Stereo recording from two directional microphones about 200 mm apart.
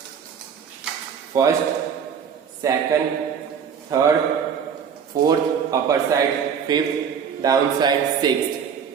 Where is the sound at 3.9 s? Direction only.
15° right (ahead or behind).